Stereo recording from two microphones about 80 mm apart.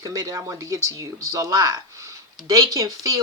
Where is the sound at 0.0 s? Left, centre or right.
Right.